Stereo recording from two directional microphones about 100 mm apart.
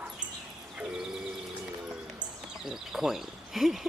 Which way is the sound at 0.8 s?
5° right (ahead or behind).